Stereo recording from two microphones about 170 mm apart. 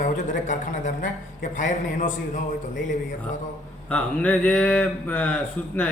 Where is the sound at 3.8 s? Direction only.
5° left (ahead or behind).